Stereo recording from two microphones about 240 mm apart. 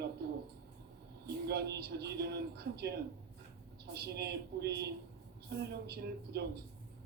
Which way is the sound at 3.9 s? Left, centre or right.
Right.